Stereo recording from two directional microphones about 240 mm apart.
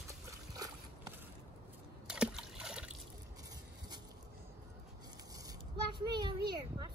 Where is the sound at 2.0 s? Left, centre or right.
Centre.